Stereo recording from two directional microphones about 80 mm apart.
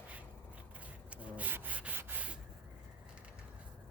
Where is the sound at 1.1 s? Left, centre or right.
Centre.